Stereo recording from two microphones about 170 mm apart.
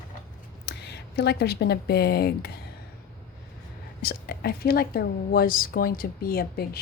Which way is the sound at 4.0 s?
60° left (ahead or behind).